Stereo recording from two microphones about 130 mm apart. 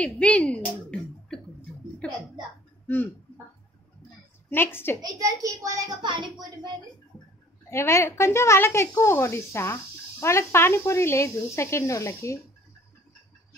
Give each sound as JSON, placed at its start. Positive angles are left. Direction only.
{"t": 0.0, "sound": "a woman's voice", "side_deg": 10}
{"t": 2.0, "sound": "music", "side_deg": 10}
{"t": 4.5, "sound": "a woman's voice", "side_deg": 15}
{"t": 5.0, "sound": "a child's voice", "side_deg": -30}
{"t": 7.7, "sound": "speech", "side_deg": 20}